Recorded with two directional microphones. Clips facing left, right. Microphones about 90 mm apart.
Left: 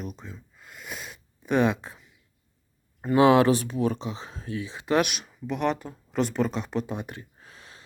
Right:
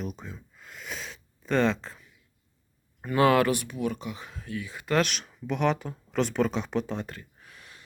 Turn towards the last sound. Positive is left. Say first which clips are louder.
# left 2 dB
turn(degrees=30)  # may be behind; listen again after turning